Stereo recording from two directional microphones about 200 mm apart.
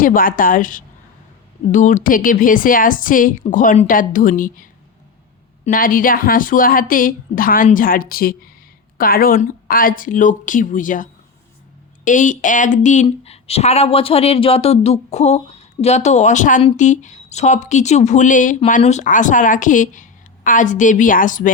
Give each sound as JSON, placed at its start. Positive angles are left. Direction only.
{"t": 0.0, "sound": "a woman's voice", "side_deg": 45}